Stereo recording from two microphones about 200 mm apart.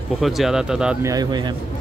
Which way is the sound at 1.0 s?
20° right (ahead or behind).